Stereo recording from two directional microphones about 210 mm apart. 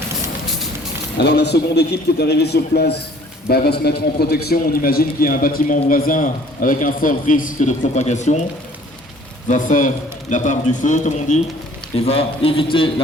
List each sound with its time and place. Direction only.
1.2 s a man's voice: 55° left (ahead or behind); by 8.4 s 35° left (ahead or behind)
9.5 s a man's voice: 40° left (ahead or behind)